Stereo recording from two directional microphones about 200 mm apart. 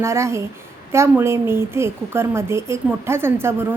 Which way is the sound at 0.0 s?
15° right (ahead or behind).